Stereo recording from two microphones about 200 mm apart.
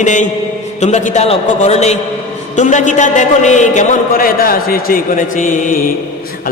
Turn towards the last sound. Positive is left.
turn(degrees=40)  # may be behind; listen again after turning